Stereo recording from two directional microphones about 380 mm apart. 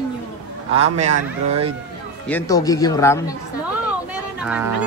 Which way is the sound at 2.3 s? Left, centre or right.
Centre.